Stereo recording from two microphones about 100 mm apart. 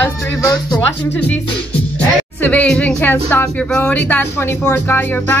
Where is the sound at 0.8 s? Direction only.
20° left (ahead or behind).